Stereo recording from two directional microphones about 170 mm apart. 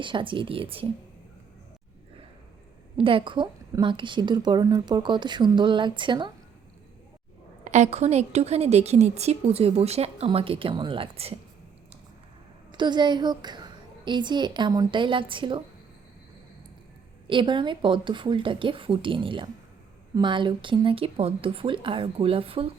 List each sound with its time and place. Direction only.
0.0 s a woman's voice: 30° right (ahead or behind)
3.0 s a woman's voice: 30° right (ahead or behind)
7.6 s a woman's voice: 40° right (ahead or behind)
12.7 s a woman's voice: 25° right (ahead or behind)
17.2 s a woman's voice: 30° right (ahead or behind)